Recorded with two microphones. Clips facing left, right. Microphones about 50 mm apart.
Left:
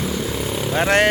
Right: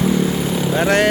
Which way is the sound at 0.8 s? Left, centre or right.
Left.